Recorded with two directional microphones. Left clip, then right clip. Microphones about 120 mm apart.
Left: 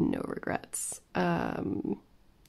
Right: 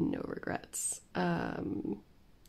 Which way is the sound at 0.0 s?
35° left (ahead or behind).